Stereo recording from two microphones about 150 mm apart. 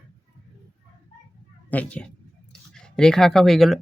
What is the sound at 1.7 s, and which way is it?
Speech, 10° left (ahead or behind).